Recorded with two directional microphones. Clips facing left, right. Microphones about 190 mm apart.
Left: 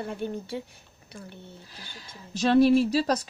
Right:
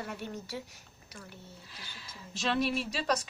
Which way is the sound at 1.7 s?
40° left (ahead or behind).